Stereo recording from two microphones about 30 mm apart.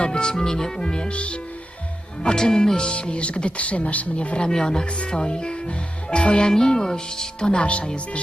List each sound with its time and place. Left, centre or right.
0.0 s speech: left
2.2 s speech: left
2.9 s speech: left
4.4 s speech: left
7.6 s speech: left